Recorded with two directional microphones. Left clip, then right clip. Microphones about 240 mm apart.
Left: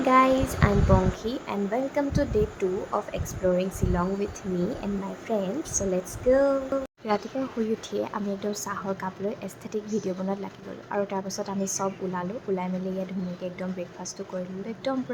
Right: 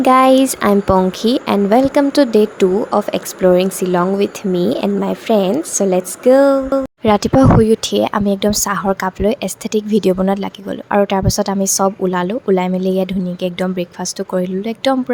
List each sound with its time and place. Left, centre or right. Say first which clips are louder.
0.0 s a woman's voice: right 11 dB; right
5.3 s a woman's voice: right 13 dB; right